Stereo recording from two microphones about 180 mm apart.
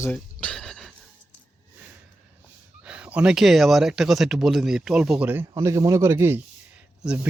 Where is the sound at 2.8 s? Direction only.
5° right (ahead or behind).